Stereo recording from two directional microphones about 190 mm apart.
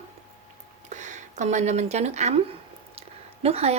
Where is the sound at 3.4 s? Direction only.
30° right (ahead or behind).